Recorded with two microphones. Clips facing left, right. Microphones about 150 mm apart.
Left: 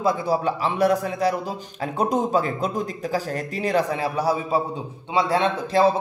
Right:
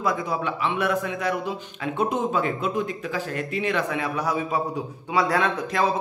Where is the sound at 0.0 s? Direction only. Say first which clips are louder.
Left 4 dB; 30° left (ahead or behind).